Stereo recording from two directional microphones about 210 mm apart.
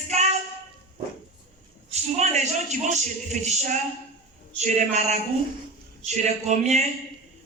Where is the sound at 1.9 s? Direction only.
35° right (ahead or behind).